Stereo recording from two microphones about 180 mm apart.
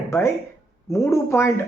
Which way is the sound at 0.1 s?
15° left (ahead or behind).